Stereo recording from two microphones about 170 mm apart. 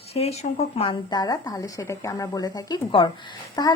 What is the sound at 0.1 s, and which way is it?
Speech, 35° left (ahead or behind).